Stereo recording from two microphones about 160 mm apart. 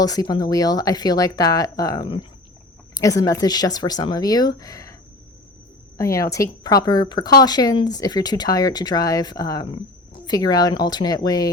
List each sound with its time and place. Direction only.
0.0 s speech: 25° left (ahead or behind)
6.0 s speech: 20° left (ahead or behind)
9.6 s speech: 35° left (ahead or behind)